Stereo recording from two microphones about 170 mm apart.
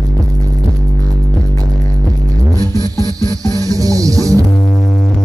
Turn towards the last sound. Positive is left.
turn(degrees=-20)  # may be behind; listen again after turning